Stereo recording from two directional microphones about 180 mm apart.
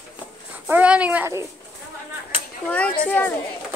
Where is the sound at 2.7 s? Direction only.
10° left (ahead or behind).